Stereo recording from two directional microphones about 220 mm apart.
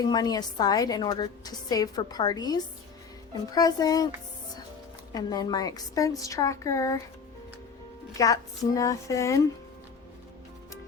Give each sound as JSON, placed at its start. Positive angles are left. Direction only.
{"t": 0.0, "sound": "a woman's voice", "side_deg": 20}
{"t": 5.1, "sound": "a woman's voice", "side_deg": 15}
{"t": 8.2, "sound": "a woman's voice", "side_deg": 15}